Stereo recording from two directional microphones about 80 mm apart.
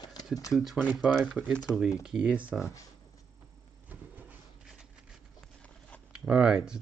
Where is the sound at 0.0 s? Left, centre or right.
Left.